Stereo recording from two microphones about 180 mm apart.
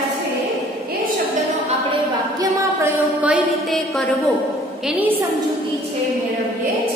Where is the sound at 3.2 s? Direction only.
Centre (ahead or behind).